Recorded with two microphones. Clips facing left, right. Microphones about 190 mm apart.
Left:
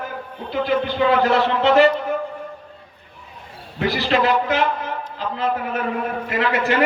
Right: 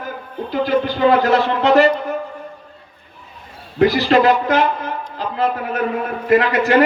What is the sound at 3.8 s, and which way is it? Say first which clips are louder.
A man's voice: right 6 dB; 40° right (ahead or behind).